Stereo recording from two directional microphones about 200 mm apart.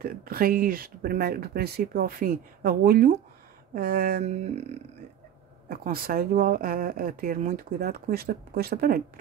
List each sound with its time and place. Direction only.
0.0 s speech: 50° right (ahead or behind); by 4.7 s 30° right (ahead or behind)
5.7 s speech: 50° right (ahead or behind)